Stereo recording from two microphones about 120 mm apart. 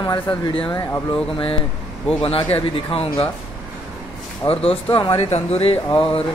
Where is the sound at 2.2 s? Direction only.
50° left (ahead or behind).